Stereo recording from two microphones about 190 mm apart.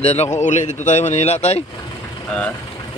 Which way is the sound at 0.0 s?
35° left (ahead or behind).